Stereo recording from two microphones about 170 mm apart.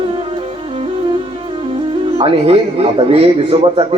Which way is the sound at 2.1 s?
35° right (ahead or behind).